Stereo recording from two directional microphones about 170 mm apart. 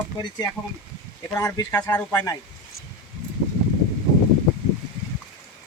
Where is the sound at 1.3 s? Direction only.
15° left (ahead or behind).